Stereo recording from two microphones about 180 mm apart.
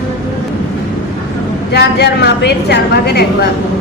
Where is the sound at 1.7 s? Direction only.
70° left (ahead or behind).